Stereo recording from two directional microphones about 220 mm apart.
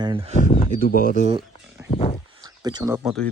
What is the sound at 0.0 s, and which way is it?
Speech, 25° right (ahead or behind).